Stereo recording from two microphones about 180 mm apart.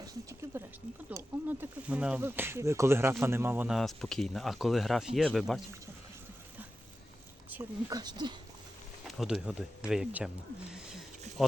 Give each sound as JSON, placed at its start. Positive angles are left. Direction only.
{"t": 0.0, "sound": "speech", "side_deg": -20}
{"t": 3.8, "sound": "speech", "side_deg": 0}
{"t": 7.5, "sound": "speech", "side_deg": -20}
{"t": 9.0, "sound": "speech", "side_deg": 0}